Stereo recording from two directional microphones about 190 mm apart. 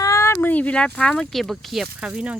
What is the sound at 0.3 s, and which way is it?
Speech, 10° left (ahead or behind).